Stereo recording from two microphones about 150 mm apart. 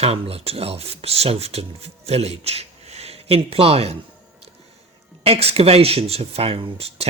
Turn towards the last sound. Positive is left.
turn(degrees=-40)  # may be behind; listen again after turning